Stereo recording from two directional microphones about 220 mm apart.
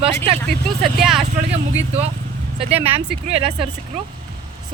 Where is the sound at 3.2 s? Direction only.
25° right (ahead or behind).